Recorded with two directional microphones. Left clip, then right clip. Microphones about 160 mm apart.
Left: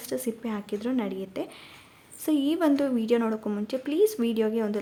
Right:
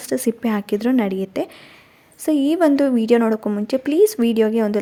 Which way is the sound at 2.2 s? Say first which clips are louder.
Right 8 dB; 35° right (ahead or behind).